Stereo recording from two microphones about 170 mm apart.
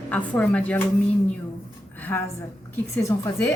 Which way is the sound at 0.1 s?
10° left (ahead or behind).